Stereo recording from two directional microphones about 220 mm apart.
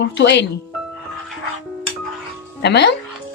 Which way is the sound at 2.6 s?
50° left (ahead or behind).